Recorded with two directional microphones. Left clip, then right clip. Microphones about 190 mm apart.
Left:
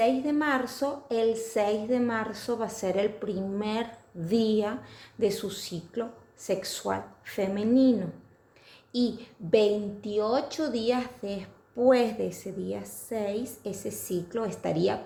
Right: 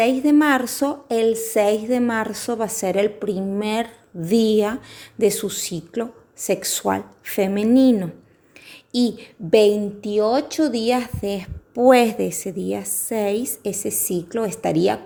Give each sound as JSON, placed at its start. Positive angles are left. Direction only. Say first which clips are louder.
{"t": 0.0, "sound": "a woman's voice", "louder": "right 9 dB", "side_deg": -50}